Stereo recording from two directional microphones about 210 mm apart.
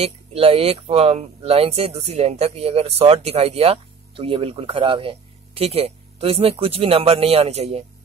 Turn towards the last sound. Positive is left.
turn(degrees=-30)  # may be behind; listen again after turning